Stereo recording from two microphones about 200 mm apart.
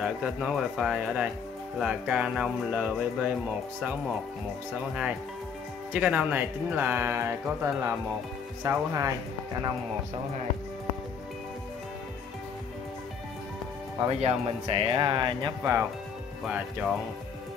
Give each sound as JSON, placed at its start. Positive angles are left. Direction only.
{"t": 0.0, "sound": "speech", "side_deg": -5}
{"t": 5.9, "sound": "speech", "side_deg": -5}
{"t": 14.2, "sound": "speech", "side_deg": -25}